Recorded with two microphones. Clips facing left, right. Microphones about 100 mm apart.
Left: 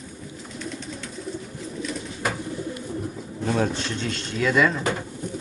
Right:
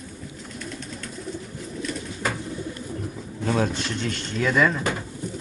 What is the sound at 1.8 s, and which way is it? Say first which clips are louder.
Bird: even; centre (ahead or behind).